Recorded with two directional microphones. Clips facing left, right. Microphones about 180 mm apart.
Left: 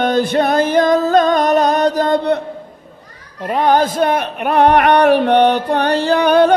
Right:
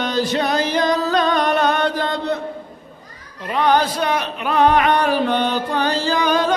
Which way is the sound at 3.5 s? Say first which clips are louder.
Left 3 dB; 45° left (ahead or behind).